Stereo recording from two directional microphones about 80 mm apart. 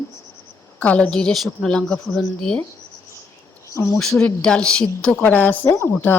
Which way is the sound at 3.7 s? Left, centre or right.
Left.